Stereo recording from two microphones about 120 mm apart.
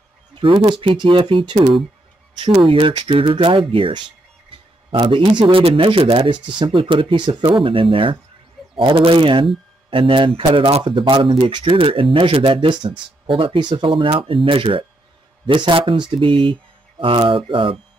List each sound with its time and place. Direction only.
0.3 s speech: 45° right (ahead or behind)
12.6 s speech: 35° right (ahead or behind)